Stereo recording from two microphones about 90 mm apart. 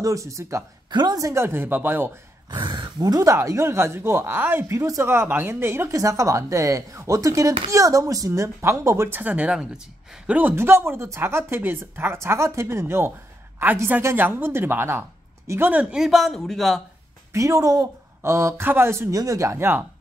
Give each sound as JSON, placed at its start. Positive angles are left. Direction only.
{"t": 0.0, "sound": "speech", "side_deg": -35}
{"t": 0.8, "sound": "a woman's voice", "side_deg": -50}
{"t": 1.3, "sound": "speech", "side_deg": -25}
{"t": 2.5, "sound": "speech", "side_deg": -55}
{"t": 10.5, "sound": "speech", "side_deg": -25}
{"t": 15.7, "sound": "speech", "side_deg": -15}
{"t": 16.0, "sound": "a man's voice", "side_deg": 0}
{"t": 17.3, "sound": "speech", "side_deg": -35}